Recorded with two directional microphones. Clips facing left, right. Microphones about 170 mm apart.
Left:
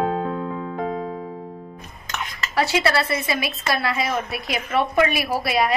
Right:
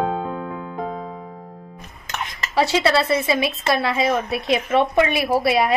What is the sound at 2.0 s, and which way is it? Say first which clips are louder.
Speech: right 1 dB; 25° right (ahead or behind).